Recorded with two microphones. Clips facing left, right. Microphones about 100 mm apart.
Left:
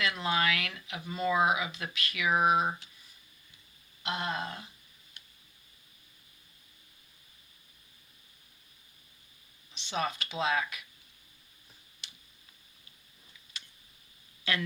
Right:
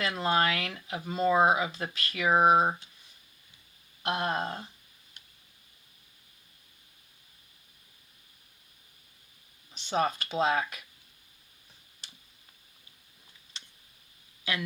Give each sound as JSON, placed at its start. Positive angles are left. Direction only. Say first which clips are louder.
{"t": 0.0, "sound": "speech", "louder": "right 3 dB", "side_deg": -35}
{"t": 4.0, "sound": "speech", "louder": "right 4 dB", "side_deg": -50}
{"t": 9.7, "sound": "speech", "louder": "right 5 dB", "side_deg": -40}
{"t": 13.5, "sound": "tick", "louder": "even", "side_deg": -30}
{"t": 14.5, "sound": "a woman's voice", "louder": "left 1 dB", "side_deg": -15}